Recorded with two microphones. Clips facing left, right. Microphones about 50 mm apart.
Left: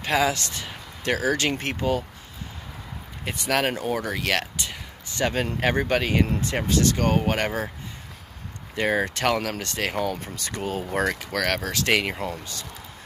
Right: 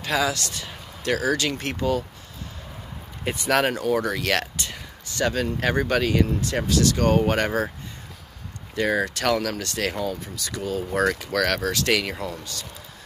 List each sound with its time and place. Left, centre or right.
0.0 s speech: left
3.3 s speech: centre
5.1 s speech: left
7.0 s speech: centre
8.7 s speech: left
9.9 s speech: left
10.8 s speech: left
11.1 s speech: centre